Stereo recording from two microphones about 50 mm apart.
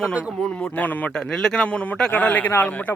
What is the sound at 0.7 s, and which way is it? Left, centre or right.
Speech, left.